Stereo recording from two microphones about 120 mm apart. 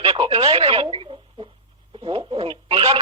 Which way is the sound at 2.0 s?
45° right (ahead or behind).